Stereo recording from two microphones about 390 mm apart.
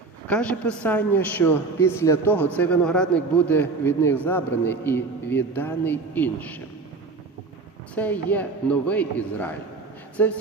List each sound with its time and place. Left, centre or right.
0.3 s a man's voice: centre
7.9 s a man's voice: centre